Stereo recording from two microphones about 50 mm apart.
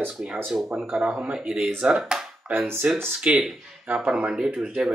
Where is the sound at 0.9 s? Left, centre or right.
Right.